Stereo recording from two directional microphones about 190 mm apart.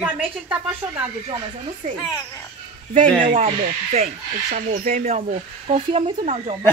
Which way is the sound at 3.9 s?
35° right (ahead or behind).